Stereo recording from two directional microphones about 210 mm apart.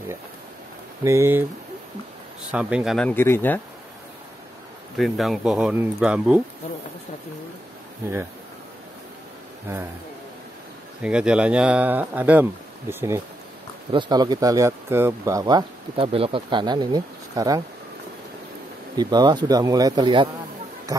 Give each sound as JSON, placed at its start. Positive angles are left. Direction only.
{"t": 1.0, "sound": "speech", "side_deg": -15}
{"t": 2.5, "sound": "speech", "side_deg": -5}
{"t": 4.9, "sound": "speech", "side_deg": 0}
{"t": 11.0, "sound": "speech", "side_deg": -5}
{"t": 13.9, "sound": "speech", "side_deg": -20}
{"t": 18.9, "sound": "speech", "side_deg": -20}